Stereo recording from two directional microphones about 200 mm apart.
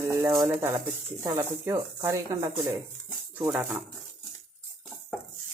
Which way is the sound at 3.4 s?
5° right (ahead or behind).